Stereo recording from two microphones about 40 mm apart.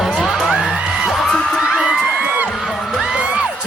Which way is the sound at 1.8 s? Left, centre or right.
Centre.